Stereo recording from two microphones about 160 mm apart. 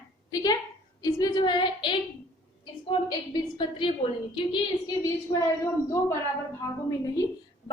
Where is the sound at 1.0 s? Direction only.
25° left (ahead or behind).